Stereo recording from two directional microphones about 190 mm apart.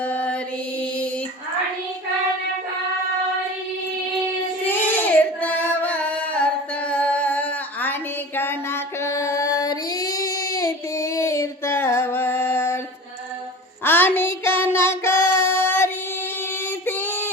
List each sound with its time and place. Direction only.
0.0 s mantra: 10° left (ahead or behind)
4.7 s singing: 10° left (ahead or behind)
8.4 s female singing: 10° left (ahead or behind)
13.8 s child singing: 10° left (ahead or behind)
16.8 s female singing: 10° left (ahead or behind)